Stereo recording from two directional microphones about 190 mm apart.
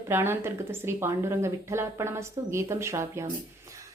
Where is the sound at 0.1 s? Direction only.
10° right (ahead or behind).